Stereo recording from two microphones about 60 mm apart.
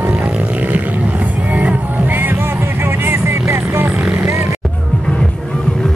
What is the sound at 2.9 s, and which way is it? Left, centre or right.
Vehicle, right.